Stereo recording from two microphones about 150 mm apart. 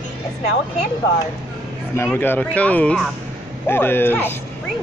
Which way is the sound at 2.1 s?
15° left (ahead or behind).